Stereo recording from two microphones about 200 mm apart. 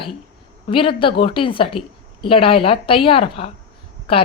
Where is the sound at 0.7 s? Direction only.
25° left (ahead or behind).